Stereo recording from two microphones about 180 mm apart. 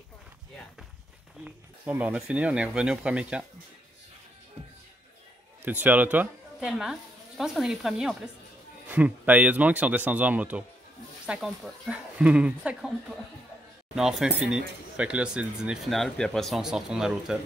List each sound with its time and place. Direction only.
1.4 s speech: 10° right (ahead or behind)
5.7 s speech: 10° right (ahead or behind)
13.9 s speech: 5° right (ahead or behind)